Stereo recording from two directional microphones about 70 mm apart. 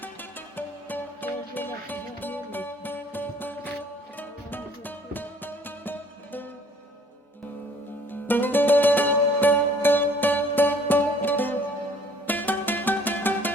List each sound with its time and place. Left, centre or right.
0.0 s music: left
8.1 s music: left